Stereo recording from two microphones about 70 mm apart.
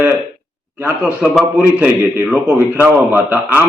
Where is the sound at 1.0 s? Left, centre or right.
Centre.